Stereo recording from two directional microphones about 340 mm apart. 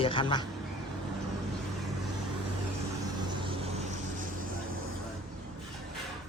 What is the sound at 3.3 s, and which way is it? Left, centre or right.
Vehicle, centre.